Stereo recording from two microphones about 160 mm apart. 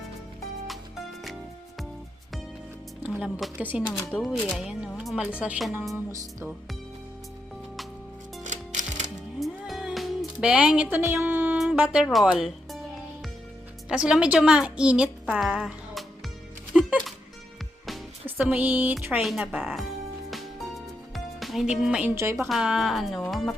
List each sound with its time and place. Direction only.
3.2 s speech: 5° right (ahead or behind)
8.4 s music: 50° right (ahead or behind)
9.4 s music: centre (ahead or behind)
12.1 s speech: 5° right (ahead or behind)
13.8 s a woman's voice: 5° right (ahead or behind)
16.7 s music: 5° right (ahead or behind)
18.3 s speech: 10° right (ahead or behind)
21.3 s speech: centre (ahead or behind)
22.1 s speech: 15° right (ahead or behind)
22.4 s speech: centre (ahead or behind)